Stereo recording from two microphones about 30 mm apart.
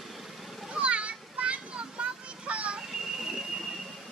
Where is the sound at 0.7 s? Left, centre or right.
Right.